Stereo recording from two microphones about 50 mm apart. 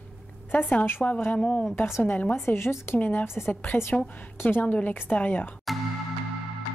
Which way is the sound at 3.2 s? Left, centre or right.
Left.